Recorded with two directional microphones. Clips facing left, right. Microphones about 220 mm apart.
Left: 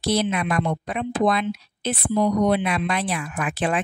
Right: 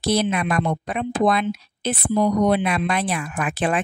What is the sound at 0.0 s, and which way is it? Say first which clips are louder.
Speech: right 2 dB; 50° right (ahead or behind).